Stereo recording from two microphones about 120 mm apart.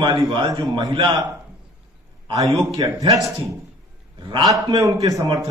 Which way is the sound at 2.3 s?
30° right (ahead or behind).